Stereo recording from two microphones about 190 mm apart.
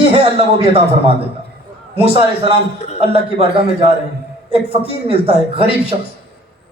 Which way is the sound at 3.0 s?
30° right (ahead or behind).